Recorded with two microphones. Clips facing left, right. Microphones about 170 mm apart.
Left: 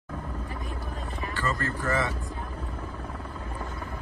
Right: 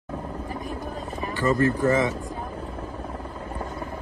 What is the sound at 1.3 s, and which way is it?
Speech, 20° right (ahead or behind).